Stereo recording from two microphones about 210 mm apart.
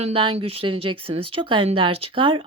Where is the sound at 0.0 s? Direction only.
25° right (ahead or behind).